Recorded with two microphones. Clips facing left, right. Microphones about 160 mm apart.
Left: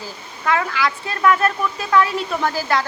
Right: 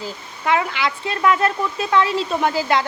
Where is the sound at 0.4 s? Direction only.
20° right (ahead or behind).